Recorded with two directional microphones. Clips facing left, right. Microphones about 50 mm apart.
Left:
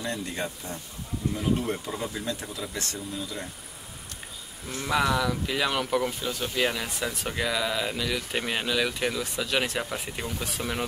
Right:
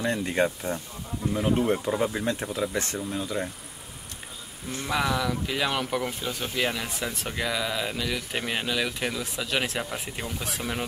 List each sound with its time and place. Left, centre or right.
0.0 s speech: right
4.8 s speech: centre